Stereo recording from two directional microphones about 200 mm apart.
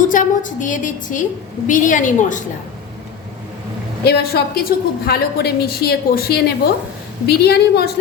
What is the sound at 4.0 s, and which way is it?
A woman's voice, 55° left (ahead or behind).